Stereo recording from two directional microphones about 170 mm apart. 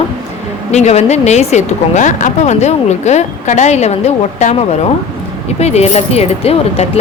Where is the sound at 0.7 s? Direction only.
40° left (ahead or behind).